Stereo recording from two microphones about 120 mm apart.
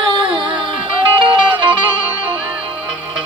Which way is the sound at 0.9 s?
45° right (ahead or behind).